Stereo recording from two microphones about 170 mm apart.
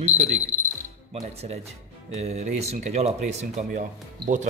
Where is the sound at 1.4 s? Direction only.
40° right (ahead or behind).